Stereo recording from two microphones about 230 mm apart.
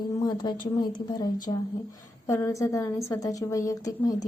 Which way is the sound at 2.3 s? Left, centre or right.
Centre.